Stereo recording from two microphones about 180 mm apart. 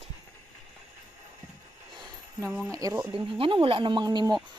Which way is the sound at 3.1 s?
30° right (ahead or behind).